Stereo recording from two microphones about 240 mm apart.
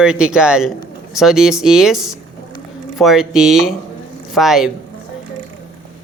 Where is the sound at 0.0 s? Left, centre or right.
Centre.